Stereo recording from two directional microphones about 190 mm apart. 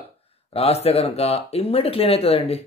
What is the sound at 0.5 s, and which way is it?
Speech, 30° left (ahead or behind).